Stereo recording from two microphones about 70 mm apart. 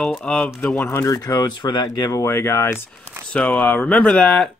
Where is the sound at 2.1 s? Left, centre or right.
Left.